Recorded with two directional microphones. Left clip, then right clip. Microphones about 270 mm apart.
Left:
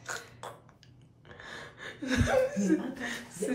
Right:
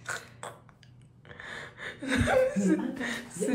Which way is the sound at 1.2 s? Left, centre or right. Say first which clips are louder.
Right 3 dB; centre.